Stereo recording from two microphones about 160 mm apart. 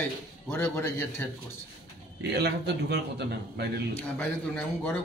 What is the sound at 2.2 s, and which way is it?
A man's voice, 90° right.